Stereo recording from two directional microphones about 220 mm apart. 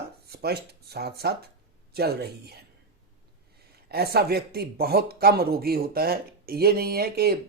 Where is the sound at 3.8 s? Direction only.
45° right (ahead or behind).